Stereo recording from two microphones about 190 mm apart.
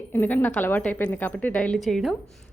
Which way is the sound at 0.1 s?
10° left (ahead or behind).